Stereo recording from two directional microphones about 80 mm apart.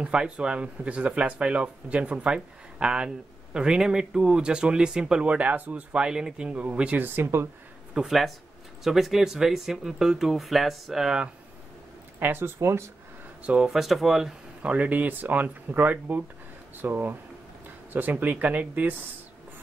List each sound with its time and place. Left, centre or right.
0.0 s speech: centre
7.9 s speech: centre
12.2 s speech: right
13.4 s speech: centre
13.7 s speech: centre
14.6 s speech: centre